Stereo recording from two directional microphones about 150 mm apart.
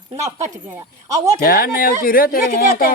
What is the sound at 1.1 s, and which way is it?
Speech, 25° right (ahead or behind).